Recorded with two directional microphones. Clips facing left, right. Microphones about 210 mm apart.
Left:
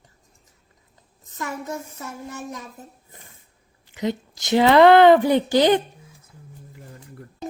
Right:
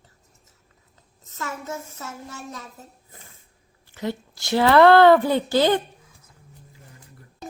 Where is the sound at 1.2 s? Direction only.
15° left (ahead or behind).